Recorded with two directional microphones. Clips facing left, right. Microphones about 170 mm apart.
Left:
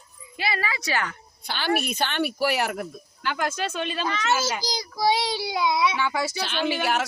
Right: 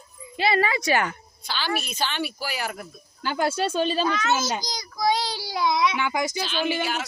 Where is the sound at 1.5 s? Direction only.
55° left (ahead or behind).